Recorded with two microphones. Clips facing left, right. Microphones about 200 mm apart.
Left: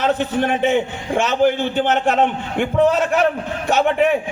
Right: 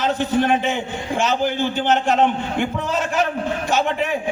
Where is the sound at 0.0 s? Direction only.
60° left (ahead or behind).